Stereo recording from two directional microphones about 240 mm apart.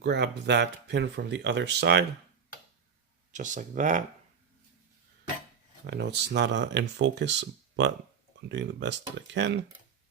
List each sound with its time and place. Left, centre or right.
0.0 s speech: right
3.3 s speech: right
5.8 s speech: right